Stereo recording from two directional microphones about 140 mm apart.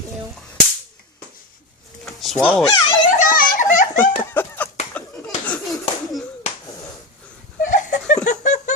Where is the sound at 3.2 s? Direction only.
75° left (ahead or behind).